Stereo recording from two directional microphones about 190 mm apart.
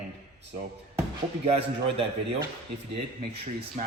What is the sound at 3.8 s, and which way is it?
Speech, 40° right (ahead or behind).